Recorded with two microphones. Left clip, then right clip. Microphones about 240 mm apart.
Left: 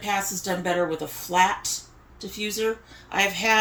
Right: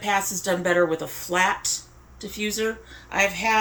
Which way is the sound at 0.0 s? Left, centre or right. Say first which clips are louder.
Right 3 dB; centre.